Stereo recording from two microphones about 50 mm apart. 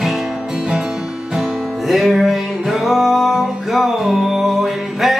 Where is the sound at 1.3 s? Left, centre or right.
Centre.